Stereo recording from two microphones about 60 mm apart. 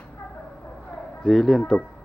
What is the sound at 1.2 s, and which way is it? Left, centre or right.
Speech, centre.